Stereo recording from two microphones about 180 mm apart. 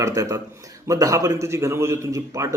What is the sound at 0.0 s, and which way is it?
A man's voice, 20° right (ahead or behind).